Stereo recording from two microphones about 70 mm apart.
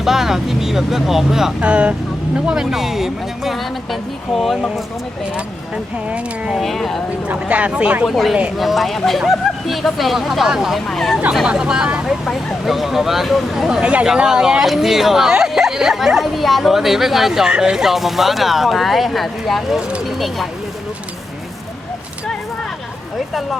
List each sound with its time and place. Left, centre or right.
0.0 s speech: centre
1.6 s speech: centre
2.5 s speech: centre
5.7 s speech: centre
6.6 s speech: centre
7.3 s speech: centre
8.0 s speech: centre
10.8 s speech: centre
11.4 s speech: centre
12.0 s speech: centre